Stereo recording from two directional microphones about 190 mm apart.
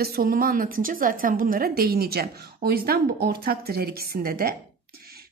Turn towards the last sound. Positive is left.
turn(degrees=-50)  # may be behind; listen again after turning